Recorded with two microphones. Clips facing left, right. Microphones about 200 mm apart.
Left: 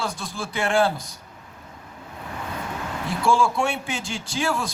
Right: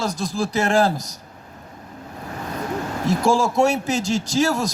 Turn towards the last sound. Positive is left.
turn(degrees=-40)  # may be behind; listen again after turning